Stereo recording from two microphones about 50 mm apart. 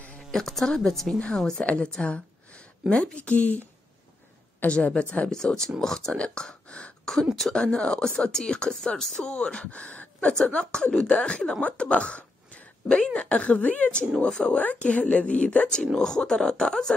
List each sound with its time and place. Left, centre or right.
0.3 s a woman's voice: centre; by 3.6 s left
4.6 s a woman's voice: left
6.1 s speech: left
6.4 s throat clearing: centre
7.3 s speech: centre
7.6 s a woman's voice: centre